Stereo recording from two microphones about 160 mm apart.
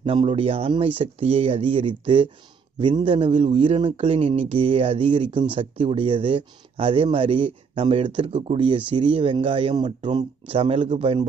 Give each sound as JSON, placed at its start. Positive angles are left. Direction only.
{"t": 0.0, "sound": "speech", "side_deg": -35}